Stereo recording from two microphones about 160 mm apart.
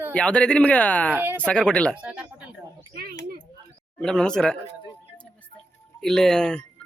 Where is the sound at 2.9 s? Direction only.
75° right (ahead or behind).